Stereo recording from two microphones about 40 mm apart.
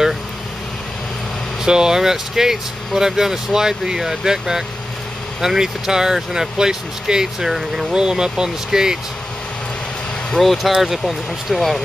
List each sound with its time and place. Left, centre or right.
1.6 s speech: centre
7.9 s speech: centre
10.3 s speech: centre
10.7 s speech: centre